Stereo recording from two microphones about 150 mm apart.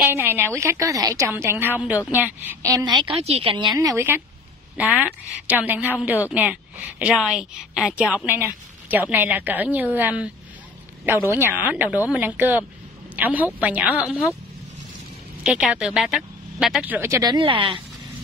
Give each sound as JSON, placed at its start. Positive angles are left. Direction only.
{"t": 0.0, "sound": "a woman's voice", "side_deg": -15}
{"t": 2.6, "sound": "a woman's voice", "side_deg": -25}
{"t": 15.4, "sound": "a woman's voice", "side_deg": -5}